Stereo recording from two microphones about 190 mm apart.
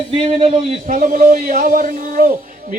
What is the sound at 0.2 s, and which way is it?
Speech, 30° right (ahead or behind).